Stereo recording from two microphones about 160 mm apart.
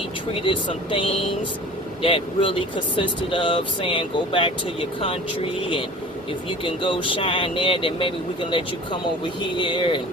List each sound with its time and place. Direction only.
0.3 s speech: 35° left (ahead or behind)